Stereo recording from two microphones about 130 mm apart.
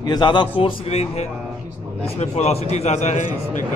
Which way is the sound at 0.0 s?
35° left (ahead or behind).